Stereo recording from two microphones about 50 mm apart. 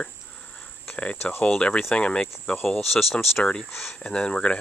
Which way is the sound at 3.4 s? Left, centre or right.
Left.